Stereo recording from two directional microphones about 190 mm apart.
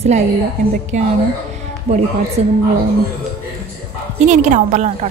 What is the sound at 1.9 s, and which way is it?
Speech, 30° right (ahead or behind).